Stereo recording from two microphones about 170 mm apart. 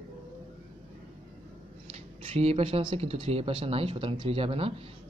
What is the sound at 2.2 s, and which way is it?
Speech, 35° right (ahead or behind).